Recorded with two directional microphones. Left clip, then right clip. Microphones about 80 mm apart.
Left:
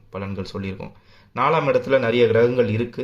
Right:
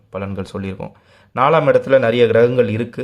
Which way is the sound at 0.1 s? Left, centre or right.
Right.